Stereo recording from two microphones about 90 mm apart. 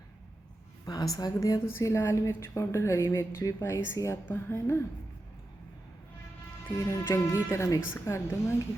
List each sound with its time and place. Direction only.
0.9 s a woman's voice: 45° left (ahead or behind)
6.7 s a woman's voice: 35° left (ahead or behind)